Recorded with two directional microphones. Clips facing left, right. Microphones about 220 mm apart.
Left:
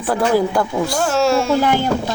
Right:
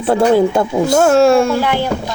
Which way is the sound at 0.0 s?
25° right (ahead or behind).